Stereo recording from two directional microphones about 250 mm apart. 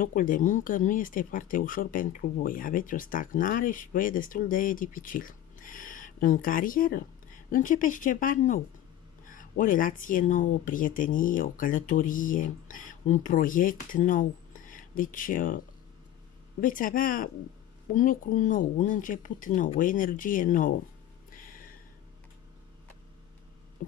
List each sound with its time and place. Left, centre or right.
0.0 s speech: left
16.6 s speech: left
21.3 s a sound: left